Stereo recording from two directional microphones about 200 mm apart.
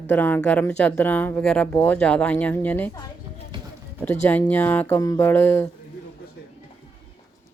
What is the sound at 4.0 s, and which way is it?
Speech, 10° left (ahead or behind).